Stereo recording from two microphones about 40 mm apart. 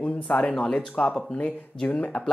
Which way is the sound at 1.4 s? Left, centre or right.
Left.